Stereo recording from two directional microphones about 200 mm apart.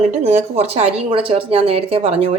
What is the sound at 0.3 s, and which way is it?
Speech, 35° right (ahead or behind).